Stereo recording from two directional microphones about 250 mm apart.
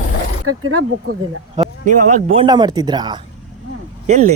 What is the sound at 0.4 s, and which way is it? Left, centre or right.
Speech, right.